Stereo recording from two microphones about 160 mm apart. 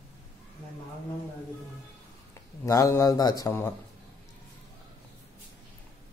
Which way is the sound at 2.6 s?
20° left (ahead or behind).